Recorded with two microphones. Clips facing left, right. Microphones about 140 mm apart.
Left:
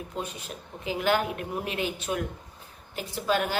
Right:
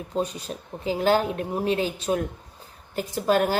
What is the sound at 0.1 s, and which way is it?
Speech, 35° right (ahead or behind).